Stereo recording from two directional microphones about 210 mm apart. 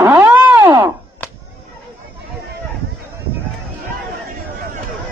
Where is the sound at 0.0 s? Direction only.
10° right (ahead or behind).